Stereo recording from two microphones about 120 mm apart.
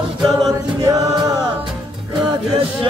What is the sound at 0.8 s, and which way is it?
Chant, 30° right (ahead or behind).